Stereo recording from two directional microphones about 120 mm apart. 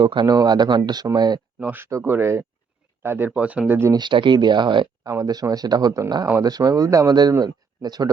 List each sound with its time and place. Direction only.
0.0 s speech: 40° right (ahead or behind)
1.5 s speech: 15° right (ahead or behind)
3.9 s speech: 40° right (ahead or behind)